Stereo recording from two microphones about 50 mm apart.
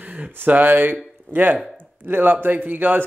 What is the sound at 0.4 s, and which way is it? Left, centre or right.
Speech, right.